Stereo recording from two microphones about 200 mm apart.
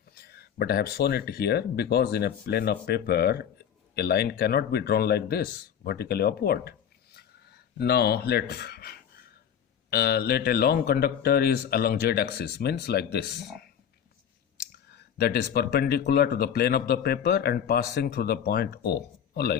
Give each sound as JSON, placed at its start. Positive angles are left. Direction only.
{"t": 0.1, "sound": "speech", "side_deg": 50}
{"t": 7.8, "sound": "speech", "side_deg": 55}
{"t": 14.9, "sound": "speech", "side_deg": 50}